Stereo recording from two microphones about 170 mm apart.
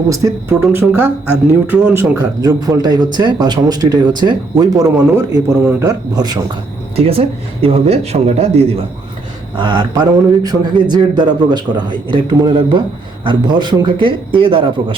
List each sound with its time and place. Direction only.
0.1 s speech: 15° right (ahead or behind)
6.9 s speech: 35° right (ahead or behind)
9.6 s speech: 25° right (ahead or behind)